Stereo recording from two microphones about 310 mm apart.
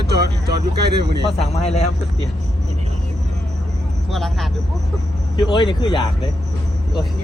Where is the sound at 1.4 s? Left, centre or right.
Centre.